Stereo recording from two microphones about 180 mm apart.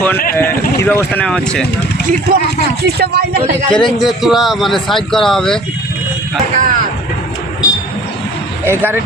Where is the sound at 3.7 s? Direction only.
Centre (ahead or behind).